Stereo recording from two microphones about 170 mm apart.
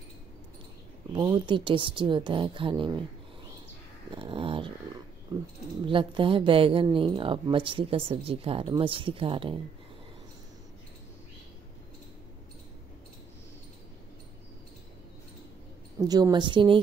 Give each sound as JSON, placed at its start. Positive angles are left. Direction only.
{"t": 1.1, "sound": "speech", "side_deg": -25}
{"t": 4.1, "sound": "a sound", "side_deg": -30}
{"t": 5.9, "sound": "speech", "side_deg": -30}
{"t": 16.1, "sound": "speech", "side_deg": -25}